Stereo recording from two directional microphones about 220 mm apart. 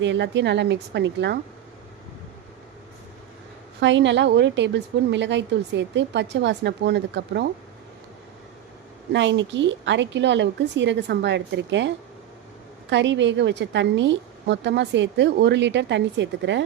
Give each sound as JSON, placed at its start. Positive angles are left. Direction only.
{"t": 0.0, "sound": "a woman's voice", "side_deg": -55}
{"t": 3.8, "sound": "a woman's voice", "side_deg": -55}
{"t": 9.1, "sound": "a woman's voice", "side_deg": -55}